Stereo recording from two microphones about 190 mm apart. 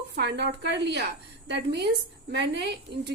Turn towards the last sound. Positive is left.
turn(degrees=-65)  # may be behind; listen again after turning